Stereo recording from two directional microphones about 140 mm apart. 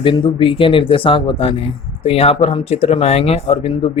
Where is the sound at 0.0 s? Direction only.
35° left (ahead or behind).